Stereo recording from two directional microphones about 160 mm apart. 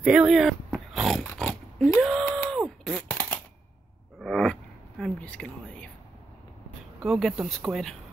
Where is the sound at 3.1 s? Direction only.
20° left (ahead or behind).